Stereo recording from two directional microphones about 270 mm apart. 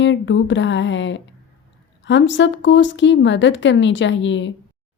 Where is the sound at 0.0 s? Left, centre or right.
Left.